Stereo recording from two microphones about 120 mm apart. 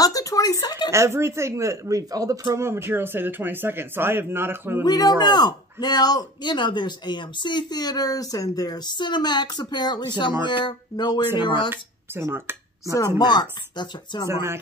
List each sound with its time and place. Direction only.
0.0 s speech: 30° left (ahead or behind)
0.9 s speech: 25° right (ahead or behind)
4.8 s speech: 35° left (ahead or behind)
11.7 s speech: 20° right (ahead or behind)
13.2 s speech: 35° left (ahead or behind)
14.2 s speech: 25° right (ahead or behind)